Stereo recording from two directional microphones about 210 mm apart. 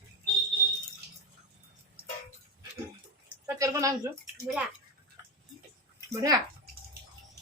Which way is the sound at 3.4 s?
15° right (ahead or behind).